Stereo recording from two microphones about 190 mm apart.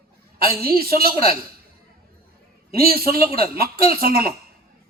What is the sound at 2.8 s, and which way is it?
A man's voice, 50° right (ahead or behind).